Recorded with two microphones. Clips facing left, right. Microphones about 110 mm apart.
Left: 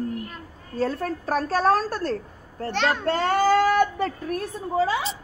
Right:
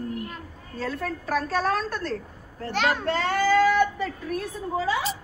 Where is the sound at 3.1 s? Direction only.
45° left (ahead or behind).